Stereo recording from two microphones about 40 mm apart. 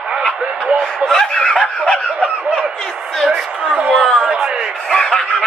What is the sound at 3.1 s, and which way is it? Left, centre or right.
Speech, centre.